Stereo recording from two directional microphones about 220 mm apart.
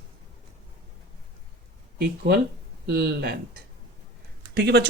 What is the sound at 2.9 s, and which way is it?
Speech, 45° right (ahead or behind).